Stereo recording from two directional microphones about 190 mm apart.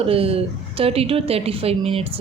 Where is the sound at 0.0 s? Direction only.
30° right (ahead or behind).